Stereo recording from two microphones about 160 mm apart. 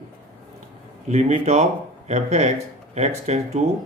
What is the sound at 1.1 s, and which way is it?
Speech, 45° right (ahead or behind).